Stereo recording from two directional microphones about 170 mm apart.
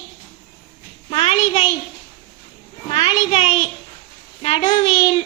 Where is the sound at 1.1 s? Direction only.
35° left (ahead or behind).